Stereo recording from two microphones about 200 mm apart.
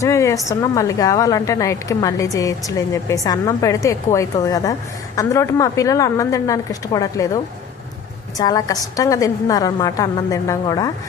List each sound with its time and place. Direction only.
0.0 s a woman's voice: 15° left (ahead or behind)
8.4 s a woman's voice: 20° left (ahead or behind)